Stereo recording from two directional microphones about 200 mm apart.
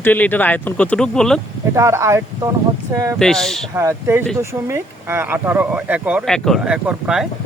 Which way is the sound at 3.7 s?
15° right (ahead or behind).